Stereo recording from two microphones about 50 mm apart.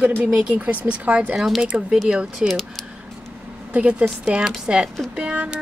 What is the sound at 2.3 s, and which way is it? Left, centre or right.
Speech, centre.